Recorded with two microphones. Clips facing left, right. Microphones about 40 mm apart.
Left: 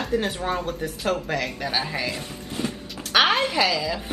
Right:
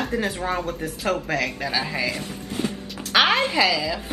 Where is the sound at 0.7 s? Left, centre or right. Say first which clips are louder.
Even; right.